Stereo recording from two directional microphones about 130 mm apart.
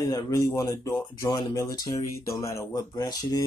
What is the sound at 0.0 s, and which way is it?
Speech, 30° left (ahead or behind).